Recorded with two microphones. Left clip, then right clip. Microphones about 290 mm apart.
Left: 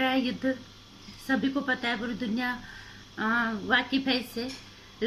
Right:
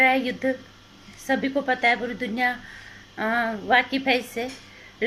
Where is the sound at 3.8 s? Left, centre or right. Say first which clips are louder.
Right 5 dB; right.